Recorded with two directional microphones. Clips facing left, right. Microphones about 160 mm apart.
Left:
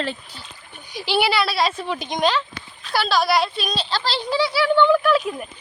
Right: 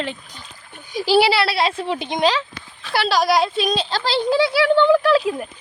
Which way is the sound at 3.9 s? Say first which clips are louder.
Right 4 dB; 50° right (ahead or behind).